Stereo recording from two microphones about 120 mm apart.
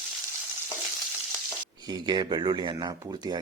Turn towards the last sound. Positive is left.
turn(degrees=-35)  # may be behind; listen again after turning